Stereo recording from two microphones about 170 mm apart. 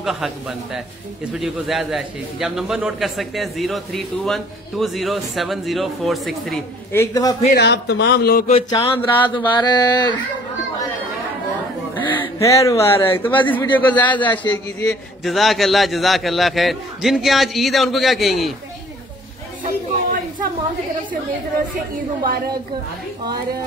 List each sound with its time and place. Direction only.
0.0 s a man's voice: centre (ahead or behind)
6.9 s a man's voice: 20° left (ahead or behind)
7.4 s speech: 75° left (ahead or behind)
8.6 s speech: 30° left (ahead or behind)
12.0 s a sound: 30° left (ahead or behind)
12.4 s a man's voice: 15° left (ahead or behind); by 18.5 s centre (ahead or behind)